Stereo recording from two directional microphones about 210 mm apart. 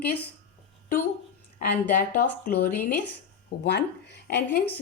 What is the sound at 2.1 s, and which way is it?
A woman's voice, 50° left (ahead or behind).